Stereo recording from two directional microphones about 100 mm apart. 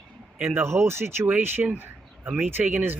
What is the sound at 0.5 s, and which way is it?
Speech, 25° right (ahead or behind).